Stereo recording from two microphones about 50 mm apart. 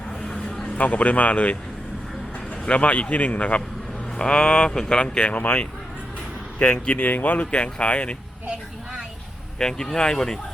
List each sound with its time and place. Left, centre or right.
0.8 s speech: left
2.6 s speech: left
6.8 s speech: left
7.5 s speech: left
9.6 s speech: centre